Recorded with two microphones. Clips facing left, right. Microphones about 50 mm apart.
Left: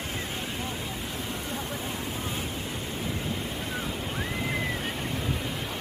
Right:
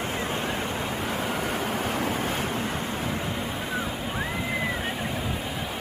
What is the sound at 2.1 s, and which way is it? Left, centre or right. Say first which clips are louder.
Waves: right 6 dB; right.